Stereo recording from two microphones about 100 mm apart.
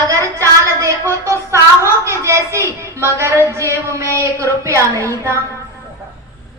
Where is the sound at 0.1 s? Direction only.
30° right (ahead or behind).